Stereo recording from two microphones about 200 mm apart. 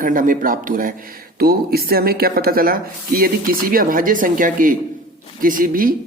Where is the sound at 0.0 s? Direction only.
45° right (ahead or behind).